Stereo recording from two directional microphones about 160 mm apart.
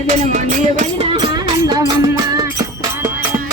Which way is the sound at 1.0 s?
30° right (ahead or behind).